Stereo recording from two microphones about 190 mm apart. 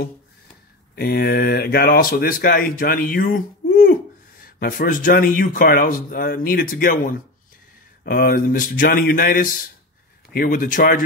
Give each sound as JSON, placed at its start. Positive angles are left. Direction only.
{"t": 0.9, "sound": "speech", "side_deg": 55}